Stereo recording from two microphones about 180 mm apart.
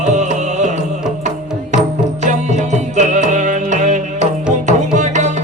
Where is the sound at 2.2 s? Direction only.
40° right (ahead or behind).